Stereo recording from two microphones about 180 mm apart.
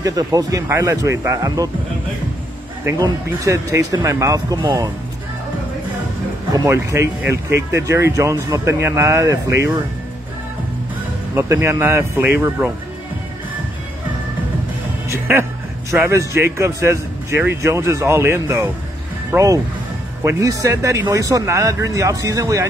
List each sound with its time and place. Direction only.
0.0 s speech: 20° right (ahead or behind)
3.0 s speech: 15° right (ahead or behind)
6.5 s speech: 15° right (ahead or behind)
11.3 s speech: 15° right (ahead or behind)
15.0 s speech: 10° right (ahead or behind)